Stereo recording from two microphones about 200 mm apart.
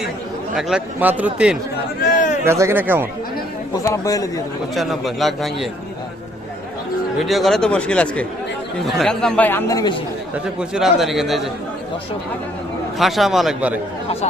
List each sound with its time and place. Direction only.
0.5 s a man's voice: 5° right (ahead or behind)
2.0 s a sound: 40° left (ahead or behind)
2.4 s speech: 15° right (ahead or behind)
3.8 s speech: 15° left (ahead or behind)
4.7 s a man's voice: centre (ahead or behind)
7.3 s a man's voice: centre (ahead or behind); by 10.0 s 20° left (ahead or behind)
10.3 s a man's voice: 5° right (ahead or behind)
13.0 s a man's voice: centre (ahead or behind)